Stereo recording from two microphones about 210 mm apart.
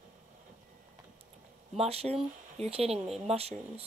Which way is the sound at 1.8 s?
30° right (ahead or behind).